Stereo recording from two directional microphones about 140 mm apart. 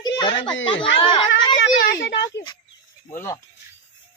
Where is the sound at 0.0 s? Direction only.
35° left (ahead or behind).